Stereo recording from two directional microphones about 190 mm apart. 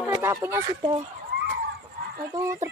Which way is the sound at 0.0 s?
10° right (ahead or behind).